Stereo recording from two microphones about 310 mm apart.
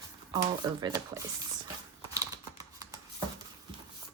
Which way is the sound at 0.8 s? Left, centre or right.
Centre.